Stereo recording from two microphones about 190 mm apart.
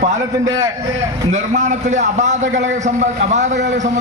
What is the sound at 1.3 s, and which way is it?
A man's voice, 40° right (ahead or behind).